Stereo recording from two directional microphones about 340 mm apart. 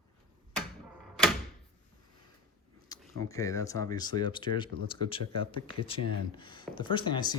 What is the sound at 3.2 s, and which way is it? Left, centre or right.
Speech, centre.